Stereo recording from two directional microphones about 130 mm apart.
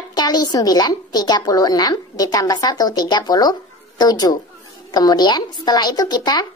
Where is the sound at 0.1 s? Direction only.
30° left (ahead or behind).